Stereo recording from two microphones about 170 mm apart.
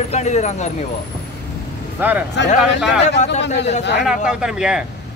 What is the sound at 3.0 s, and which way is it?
Speech, 40° left (ahead or behind).